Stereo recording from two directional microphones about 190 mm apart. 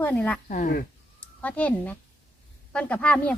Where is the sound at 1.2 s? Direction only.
10° left (ahead or behind).